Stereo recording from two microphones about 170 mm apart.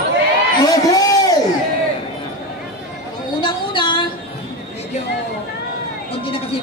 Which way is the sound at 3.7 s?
30° left (ahead or behind).